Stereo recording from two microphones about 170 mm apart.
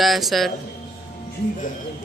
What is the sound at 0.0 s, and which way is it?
Speech, centre (ahead or behind).